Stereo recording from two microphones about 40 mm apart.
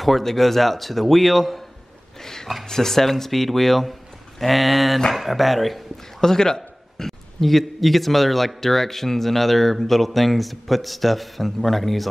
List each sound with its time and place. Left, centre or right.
0.0 s a man's voice: centre
6.2 s a man's voice: centre